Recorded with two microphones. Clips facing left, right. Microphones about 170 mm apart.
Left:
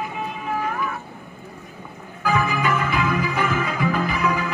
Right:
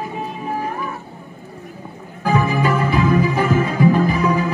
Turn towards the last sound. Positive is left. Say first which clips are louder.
# right 5 dB
turn(degrees=-35)  # may be behind; listen again after turning